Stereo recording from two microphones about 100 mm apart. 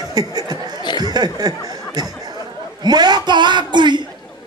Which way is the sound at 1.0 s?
40° right (ahead or behind).